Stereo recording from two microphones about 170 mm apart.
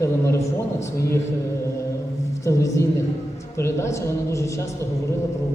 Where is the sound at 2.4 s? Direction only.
20° left (ahead or behind).